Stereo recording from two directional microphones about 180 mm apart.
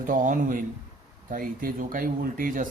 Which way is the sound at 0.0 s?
50° right (ahead or behind).